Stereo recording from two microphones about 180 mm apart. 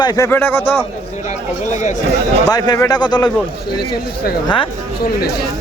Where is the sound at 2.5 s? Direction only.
20° left (ahead or behind).